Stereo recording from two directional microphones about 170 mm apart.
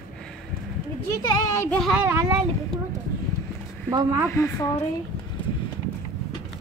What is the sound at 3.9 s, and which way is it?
Speech, 25° right (ahead or behind).